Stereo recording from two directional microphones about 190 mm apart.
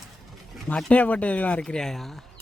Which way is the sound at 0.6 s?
5° left (ahead or behind).